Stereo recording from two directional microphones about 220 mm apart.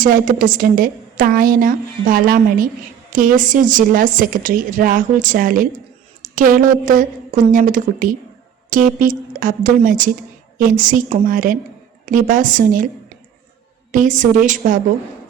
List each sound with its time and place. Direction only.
0.0 s a woman's voice: 40° right (ahead or behind)
13.9 s a woman's voice: 35° right (ahead or behind)